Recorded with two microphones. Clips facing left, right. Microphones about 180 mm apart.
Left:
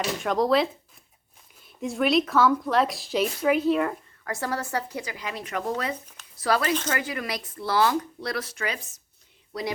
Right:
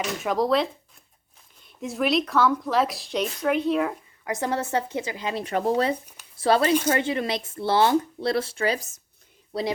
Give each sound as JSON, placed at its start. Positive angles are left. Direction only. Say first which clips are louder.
{"t": 0.0, "sound": "speech", "louder": "even", "side_deg": 0}
{"t": 4.2, "sound": "speech", "louder": "right 4 dB", "side_deg": -20}